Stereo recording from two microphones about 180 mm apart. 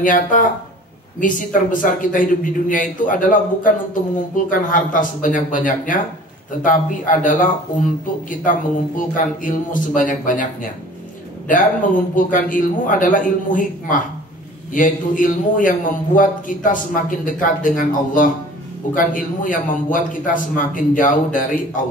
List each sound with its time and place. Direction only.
0.0 s a man's voice: 45° left (ahead or behind)